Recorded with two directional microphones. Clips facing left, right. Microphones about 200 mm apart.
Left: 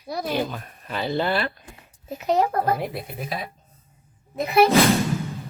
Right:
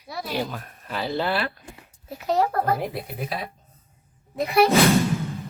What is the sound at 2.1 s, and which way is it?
Speech, 20° left (ahead or behind).